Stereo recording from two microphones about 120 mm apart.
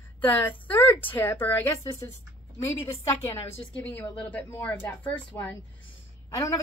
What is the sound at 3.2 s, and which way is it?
A woman's voice, 20° left (ahead or behind).